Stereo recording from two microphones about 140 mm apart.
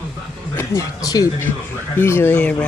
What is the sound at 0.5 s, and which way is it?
A man's voice, 25° left (ahead or behind).